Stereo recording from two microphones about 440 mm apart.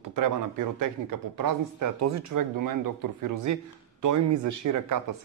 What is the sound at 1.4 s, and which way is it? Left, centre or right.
A man's voice, right.